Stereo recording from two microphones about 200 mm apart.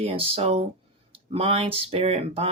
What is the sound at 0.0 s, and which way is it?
Speech, 30° right (ahead or behind).